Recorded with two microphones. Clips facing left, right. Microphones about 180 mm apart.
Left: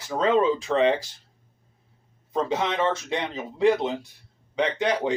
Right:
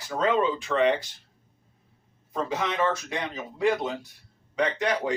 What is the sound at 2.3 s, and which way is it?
Speech, 25° left (ahead or behind).